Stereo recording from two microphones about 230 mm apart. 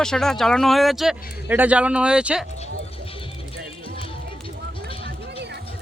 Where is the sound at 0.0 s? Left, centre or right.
Centre.